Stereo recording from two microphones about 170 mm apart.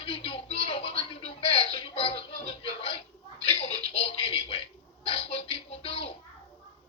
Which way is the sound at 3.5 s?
35° left (ahead or behind).